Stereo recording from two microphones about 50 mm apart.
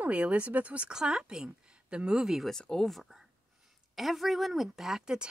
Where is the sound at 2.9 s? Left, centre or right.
Centre.